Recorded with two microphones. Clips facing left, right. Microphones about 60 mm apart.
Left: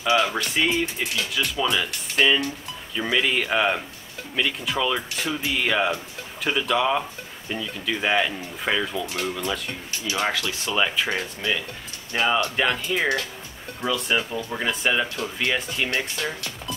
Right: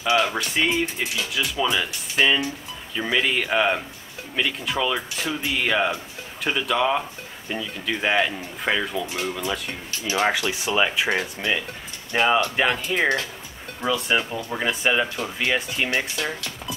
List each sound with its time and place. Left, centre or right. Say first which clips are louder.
0.3 s speech: even; centre
9.7 s speech: right 1 dB; right
12.5 s speech: right 1 dB; centre